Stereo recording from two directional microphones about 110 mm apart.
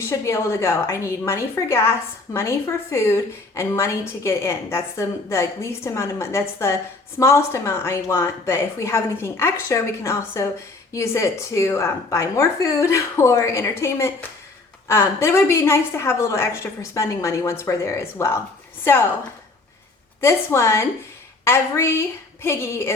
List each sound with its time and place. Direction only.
0.0 s a woman's voice: 25° left (ahead or behind)
20.2 s a woman's voice: 25° left (ahead or behind)